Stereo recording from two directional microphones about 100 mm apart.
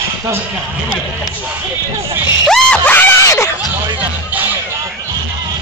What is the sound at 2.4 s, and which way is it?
Screaming, 5° left (ahead or behind).